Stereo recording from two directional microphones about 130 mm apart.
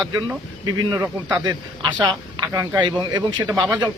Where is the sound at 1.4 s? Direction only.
30° right (ahead or behind).